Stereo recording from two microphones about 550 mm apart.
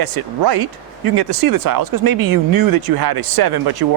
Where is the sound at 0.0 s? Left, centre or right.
Right.